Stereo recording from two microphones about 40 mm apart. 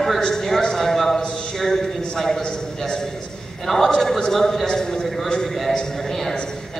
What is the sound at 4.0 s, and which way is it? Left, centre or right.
A man's voice, centre.